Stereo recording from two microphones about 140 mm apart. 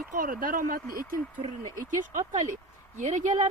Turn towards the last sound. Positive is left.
turn(degrees=-60)  # may be behind; listen again after turning